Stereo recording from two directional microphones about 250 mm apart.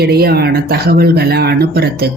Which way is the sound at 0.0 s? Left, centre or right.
Right.